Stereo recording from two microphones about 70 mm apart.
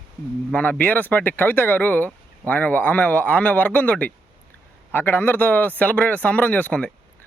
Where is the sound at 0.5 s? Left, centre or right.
Left.